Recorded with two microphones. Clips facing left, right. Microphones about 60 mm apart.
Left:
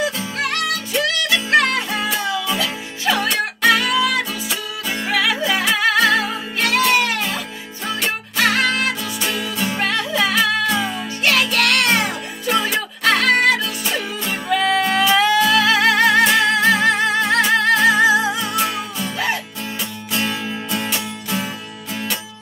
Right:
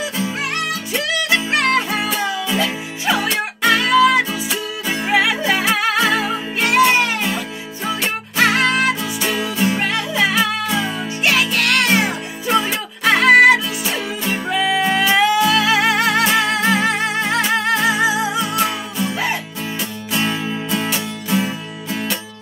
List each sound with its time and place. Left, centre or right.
1.0 s music: centre
3.1 s music: centre
5.0 s music: right